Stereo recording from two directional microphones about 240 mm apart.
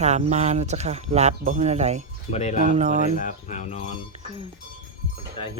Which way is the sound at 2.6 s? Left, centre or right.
Right.